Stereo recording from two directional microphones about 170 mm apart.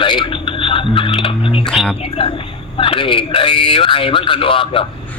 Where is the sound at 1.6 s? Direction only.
Centre (ahead or behind).